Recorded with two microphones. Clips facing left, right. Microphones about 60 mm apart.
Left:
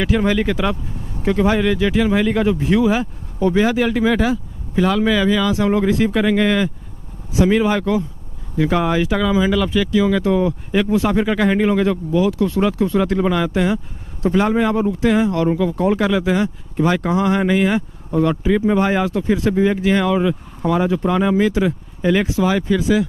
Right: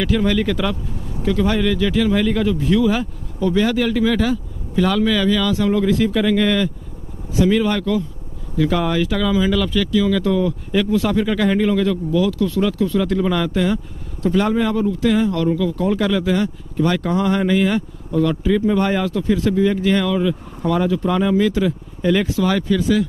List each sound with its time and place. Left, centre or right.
0.0 s speech: centre
13.3 s speech: centre; by 16.0 s left
16.0 s speech: centre
18.1 s speech: left
18.8 s speech: centre
19.0 s speech: left